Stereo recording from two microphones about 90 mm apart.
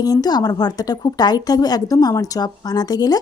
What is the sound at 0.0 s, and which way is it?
A woman's voice, 45° left (ahead or behind).